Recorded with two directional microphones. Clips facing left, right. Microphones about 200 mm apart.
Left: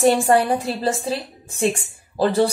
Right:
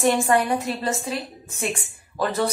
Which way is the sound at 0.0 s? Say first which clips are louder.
Left 4 dB; 30° left (ahead or behind).